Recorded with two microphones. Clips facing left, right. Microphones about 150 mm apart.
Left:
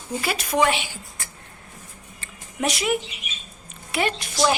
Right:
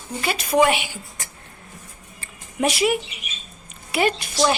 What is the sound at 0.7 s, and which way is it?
Speech, 10° right (ahead or behind).